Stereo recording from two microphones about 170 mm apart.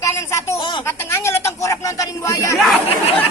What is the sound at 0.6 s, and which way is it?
Speech, 25° left (ahead or behind).